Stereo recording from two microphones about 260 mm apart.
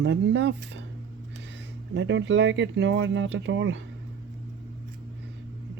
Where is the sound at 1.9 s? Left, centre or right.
Right.